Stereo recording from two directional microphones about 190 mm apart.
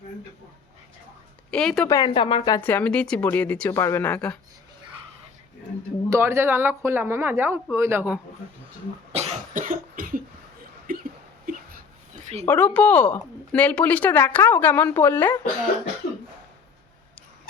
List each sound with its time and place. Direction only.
1.5 s speech: 5° left (ahead or behind)
1.9 s speech: 20° left (ahead or behind)
2.6 s speech: 10° left (ahead or behind)
6.1 s speech: 15° right (ahead or behind)
9.1 s cough: 35° right (ahead or behind)
9.6 s cough: 45° right (ahead or behind)
10.9 s a sound: 50° right (ahead or behind)
12.1 s a sound: 35° right (ahead or behind)
12.5 s speech: 10° left (ahead or behind)